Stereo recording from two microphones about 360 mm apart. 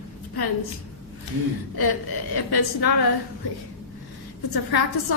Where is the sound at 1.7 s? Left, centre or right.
Left.